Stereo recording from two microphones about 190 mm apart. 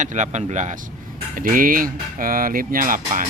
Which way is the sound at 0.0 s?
40° right (ahead or behind).